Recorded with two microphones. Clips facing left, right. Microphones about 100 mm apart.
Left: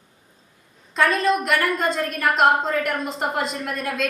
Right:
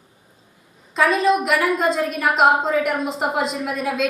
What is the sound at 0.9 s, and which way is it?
A woman's voice, centre (ahead or behind).